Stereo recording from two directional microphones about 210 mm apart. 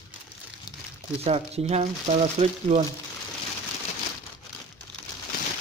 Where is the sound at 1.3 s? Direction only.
30° right (ahead or behind).